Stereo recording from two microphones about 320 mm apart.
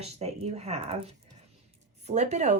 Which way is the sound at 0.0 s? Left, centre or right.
Centre.